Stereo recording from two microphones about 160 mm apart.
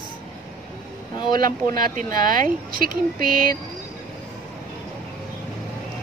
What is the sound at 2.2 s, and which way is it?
Speech, 60° right (ahead or behind).